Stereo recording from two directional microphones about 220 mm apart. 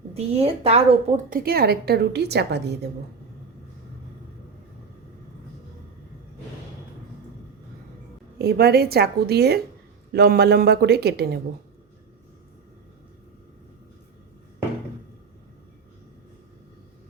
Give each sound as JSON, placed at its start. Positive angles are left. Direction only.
{"t": 0.1, "sound": "a woman's voice", "side_deg": -25}
{"t": 8.4, "sound": "a woman's voice", "side_deg": -45}